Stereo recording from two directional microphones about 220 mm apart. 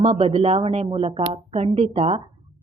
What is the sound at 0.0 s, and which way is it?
Speech, 30° right (ahead or behind).